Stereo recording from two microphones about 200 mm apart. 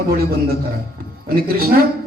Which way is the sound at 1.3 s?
50° right (ahead or behind).